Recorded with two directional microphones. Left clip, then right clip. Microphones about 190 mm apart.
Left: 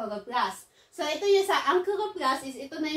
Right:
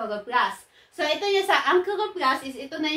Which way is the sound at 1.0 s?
35° right (ahead or behind).